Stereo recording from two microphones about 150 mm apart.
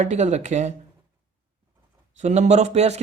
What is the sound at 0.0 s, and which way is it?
Speech, 50° right (ahead or behind).